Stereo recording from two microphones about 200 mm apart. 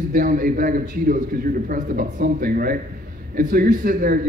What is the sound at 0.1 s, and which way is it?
A man's voice, 40° right (ahead or behind).